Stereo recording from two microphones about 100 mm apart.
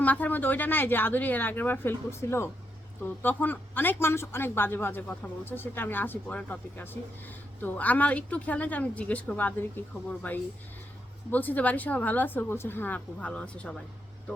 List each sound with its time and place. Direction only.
0.0 s a woman's voice: 15° left (ahead or behind)